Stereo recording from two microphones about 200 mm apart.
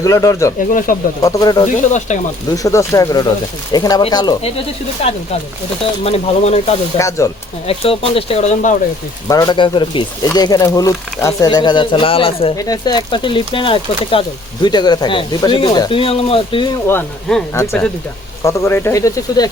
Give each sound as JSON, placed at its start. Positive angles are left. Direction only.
{"t": 0.0, "sound": "speech", "side_deg": 15}
{"t": 0.7, "sound": "speech", "side_deg": 45}
{"t": 1.2, "sound": "speech", "side_deg": 15}
{"t": 1.9, "sound": "speech", "side_deg": 35}
{"t": 2.5, "sound": "speech", "side_deg": 15}
{"t": 6.9, "sound": "speech", "side_deg": 15}
{"t": 7.7, "sound": "speech", "side_deg": 30}
{"t": 9.2, "sound": "speech", "side_deg": 20}
{"t": 16.8, "sound": "speech", "side_deg": 5}